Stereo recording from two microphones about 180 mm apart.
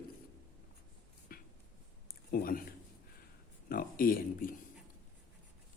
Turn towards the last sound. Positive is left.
turn(degrees=50)  # may be behind; listen again after turning